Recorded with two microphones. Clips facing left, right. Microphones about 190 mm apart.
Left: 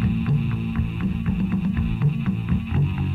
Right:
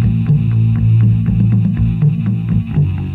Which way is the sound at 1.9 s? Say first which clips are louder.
Right 7 dB; 40° right (ahead or behind).